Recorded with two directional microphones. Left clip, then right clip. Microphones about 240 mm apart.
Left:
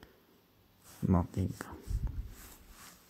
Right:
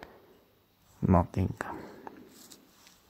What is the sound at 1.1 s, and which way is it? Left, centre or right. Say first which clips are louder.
Speech: right 7 dB; right.